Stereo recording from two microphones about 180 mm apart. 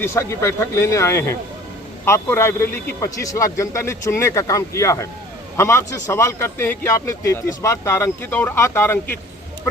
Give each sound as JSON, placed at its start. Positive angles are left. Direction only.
{"t": 0.0, "sound": "a man's voice", "side_deg": 15}